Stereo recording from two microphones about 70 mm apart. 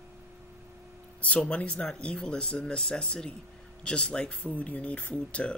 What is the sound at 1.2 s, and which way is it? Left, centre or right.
Speech, centre.